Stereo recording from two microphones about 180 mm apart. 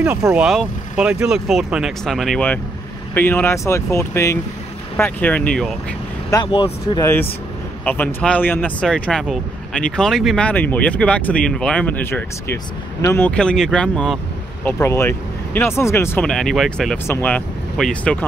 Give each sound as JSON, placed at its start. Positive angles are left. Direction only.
{"t": 0.0, "sound": "speech", "side_deg": -5}
{"t": 6.3, "sound": "speech", "side_deg": 25}
{"t": 7.8, "sound": "speech", "side_deg": 10}